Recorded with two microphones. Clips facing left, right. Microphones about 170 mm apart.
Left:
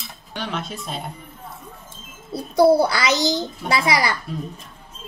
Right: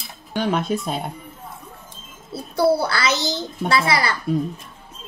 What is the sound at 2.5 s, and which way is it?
A child's voice, 15° left (ahead or behind).